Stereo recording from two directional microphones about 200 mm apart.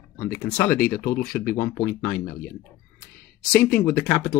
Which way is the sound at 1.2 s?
50° left (ahead or behind).